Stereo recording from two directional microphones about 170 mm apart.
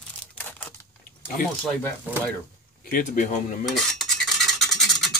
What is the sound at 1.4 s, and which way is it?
Speech, 55° left (ahead or behind).